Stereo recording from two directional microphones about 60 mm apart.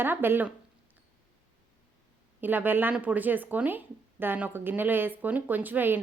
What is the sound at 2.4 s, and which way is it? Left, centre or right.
A woman's voice, right.